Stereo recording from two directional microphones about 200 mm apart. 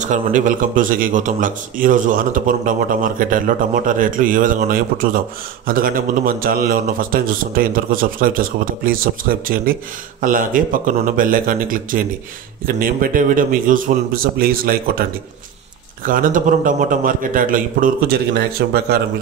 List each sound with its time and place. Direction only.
0.0 s speech: 40° right (ahead or behind); by 18.9 s 55° right (ahead or behind)